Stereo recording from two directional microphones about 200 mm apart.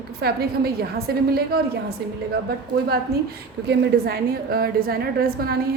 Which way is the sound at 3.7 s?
55° right (ahead or behind).